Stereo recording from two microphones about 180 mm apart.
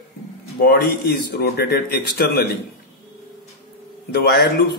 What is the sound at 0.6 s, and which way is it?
Speech, 60° left (ahead or behind).